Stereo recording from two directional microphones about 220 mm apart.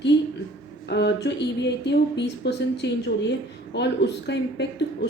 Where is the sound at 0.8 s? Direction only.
50° left (ahead or behind).